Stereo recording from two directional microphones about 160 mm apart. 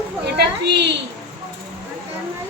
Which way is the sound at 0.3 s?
90° right.